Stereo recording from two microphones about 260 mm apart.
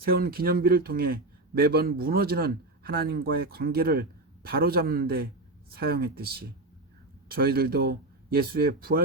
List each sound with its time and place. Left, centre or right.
0.0 s a man's voice: right